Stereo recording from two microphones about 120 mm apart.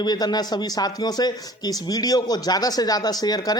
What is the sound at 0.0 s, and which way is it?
Speech, 35° left (ahead or behind).